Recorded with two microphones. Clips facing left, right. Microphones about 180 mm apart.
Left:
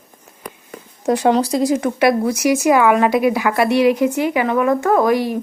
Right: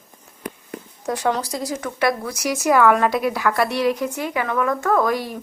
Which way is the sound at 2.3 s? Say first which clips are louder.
Left 5 dB; 5° left (ahead or behind).